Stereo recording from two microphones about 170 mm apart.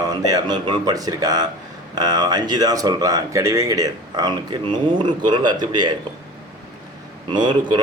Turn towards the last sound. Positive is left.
turn(degrees=-25)  # may be behind; listen again after turning